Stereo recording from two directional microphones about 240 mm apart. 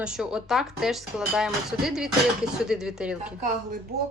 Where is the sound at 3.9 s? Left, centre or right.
Right.